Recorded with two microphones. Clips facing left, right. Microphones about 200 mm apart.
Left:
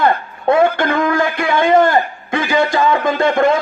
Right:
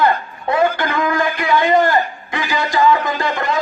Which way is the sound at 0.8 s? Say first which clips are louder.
Left 3 dB; 55° left (ahead or behind).